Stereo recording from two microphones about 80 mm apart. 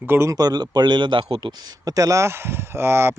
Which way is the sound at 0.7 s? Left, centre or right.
Right.